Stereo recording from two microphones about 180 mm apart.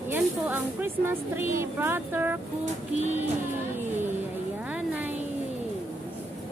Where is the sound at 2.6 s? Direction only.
40° right (ahead or behind).